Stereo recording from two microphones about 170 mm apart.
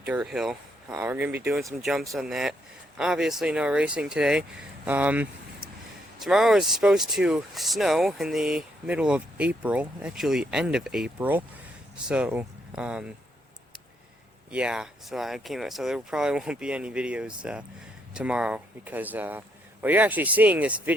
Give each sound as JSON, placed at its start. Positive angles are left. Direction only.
{"t": 0.0, "sound": "speech", "side_deg": -5}
{"t": 0.9, "sound": "speech", "side_deg": -15}
{"t": 14.5, "sound": "speech", "side_deg": -5}